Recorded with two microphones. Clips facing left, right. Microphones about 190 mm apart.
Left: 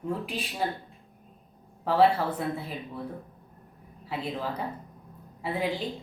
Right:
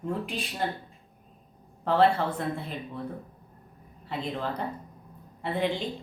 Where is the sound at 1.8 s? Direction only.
5° left (ahead or behind).